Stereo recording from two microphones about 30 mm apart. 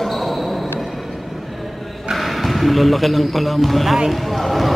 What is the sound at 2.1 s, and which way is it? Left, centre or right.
A man's voice, centre.